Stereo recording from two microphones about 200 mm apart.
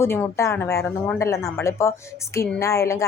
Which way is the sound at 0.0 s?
10° left (ahead or behind).